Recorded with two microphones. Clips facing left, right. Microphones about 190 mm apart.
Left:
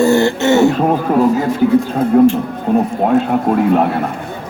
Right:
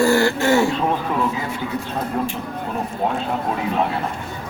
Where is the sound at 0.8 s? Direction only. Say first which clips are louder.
Left 8 dB; 50° left (ahead or behind).